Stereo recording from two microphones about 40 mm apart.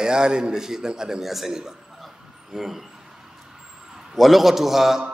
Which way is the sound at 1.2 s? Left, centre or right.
Centre.